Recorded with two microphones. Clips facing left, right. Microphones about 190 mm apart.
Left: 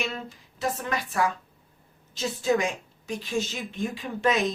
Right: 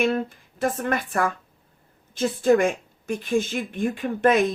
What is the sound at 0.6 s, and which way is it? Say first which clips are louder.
Speech: right 5 dB; 55° right (ahead or behind).